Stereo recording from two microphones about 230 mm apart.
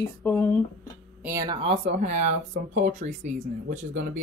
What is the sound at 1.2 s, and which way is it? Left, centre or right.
Speech, centre.